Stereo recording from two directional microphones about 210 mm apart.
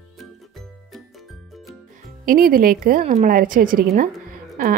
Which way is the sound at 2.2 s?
40° right (ahead or behind).